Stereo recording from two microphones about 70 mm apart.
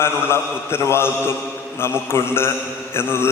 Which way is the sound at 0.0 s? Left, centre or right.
Left.